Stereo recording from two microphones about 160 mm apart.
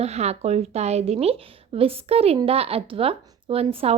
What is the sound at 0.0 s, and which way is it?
Speech, 40° right (ahead or behind).